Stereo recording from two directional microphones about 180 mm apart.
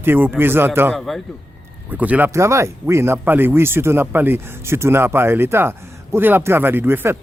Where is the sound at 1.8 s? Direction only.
10° right (ahead or behind).